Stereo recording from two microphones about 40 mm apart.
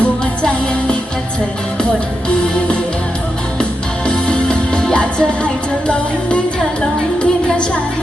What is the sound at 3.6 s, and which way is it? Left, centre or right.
Music, left.